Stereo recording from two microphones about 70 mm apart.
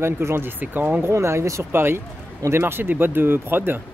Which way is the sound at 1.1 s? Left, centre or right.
Right.